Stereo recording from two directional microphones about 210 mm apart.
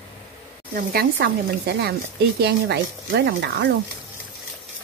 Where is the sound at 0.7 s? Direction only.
50° right (ahead or behind).